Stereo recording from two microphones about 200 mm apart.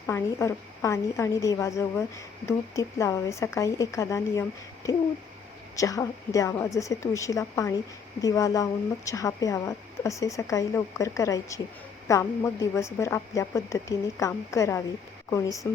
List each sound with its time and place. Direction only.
0.1 s a woman's voice: 15° left (ahead or behind)